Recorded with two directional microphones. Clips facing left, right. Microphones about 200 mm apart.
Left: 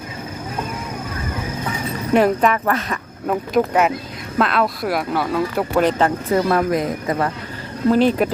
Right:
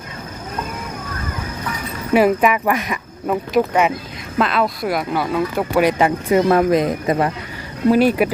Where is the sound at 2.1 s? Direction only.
5° right (ahead or behind).